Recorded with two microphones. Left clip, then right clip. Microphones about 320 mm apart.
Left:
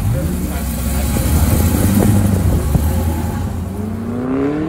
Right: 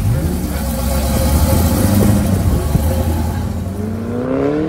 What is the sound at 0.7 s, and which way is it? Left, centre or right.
Vehicle, centre.